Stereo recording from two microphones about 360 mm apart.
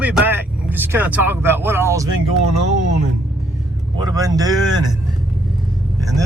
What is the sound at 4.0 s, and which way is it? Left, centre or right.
Speech, centre.